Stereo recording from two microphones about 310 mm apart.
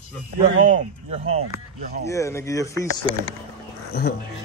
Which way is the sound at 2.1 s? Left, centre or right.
Centre.